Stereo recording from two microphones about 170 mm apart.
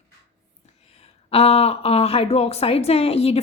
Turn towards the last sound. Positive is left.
turn(degrees=35)  # may be behind; listen again after turning